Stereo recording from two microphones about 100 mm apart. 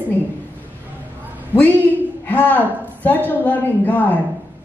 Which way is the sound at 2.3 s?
15° left (ahead or behind).